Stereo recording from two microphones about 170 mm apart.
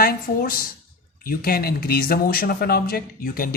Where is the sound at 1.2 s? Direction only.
60° left (ahead or behind).